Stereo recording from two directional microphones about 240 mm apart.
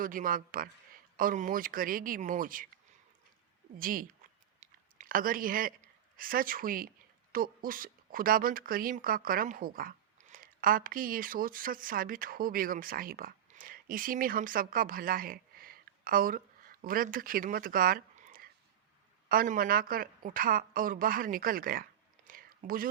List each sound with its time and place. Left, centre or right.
0.0 s speech: right
3.8 s speech: right
22.3 s a sound: right